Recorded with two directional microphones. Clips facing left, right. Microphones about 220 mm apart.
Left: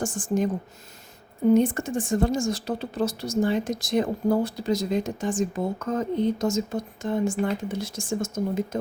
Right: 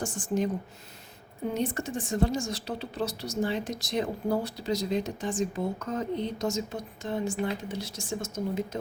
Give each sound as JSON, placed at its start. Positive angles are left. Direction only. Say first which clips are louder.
{"t": 0.0, "sound": "a woman's voice", "louder": "left 4 dB", "side_deg": 50}
{"t": 1.5, "sound": "a woman's voice", "louder": "left 8 dB", "side_deg": 50}